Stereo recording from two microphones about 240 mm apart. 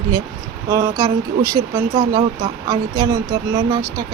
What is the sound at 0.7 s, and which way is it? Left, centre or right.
Speech, centre.